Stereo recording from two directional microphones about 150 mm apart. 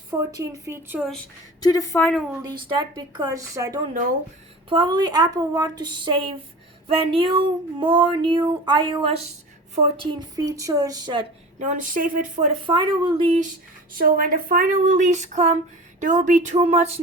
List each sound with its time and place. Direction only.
0.1 s a woman's voice: 20° right (ahead or behind)
1.6 s a woman's voice: 25° left (ahead or behind)
2.6 s a woman's voice: 30° right (ahead or behind)
11.6 s speech: 60° right (ahead or behind)
12.6 s speech: 30° right (ahead or behind)
13.9 s speech: 70° right (ahead or behind); by 17.0 s 45° right (ahead or behind)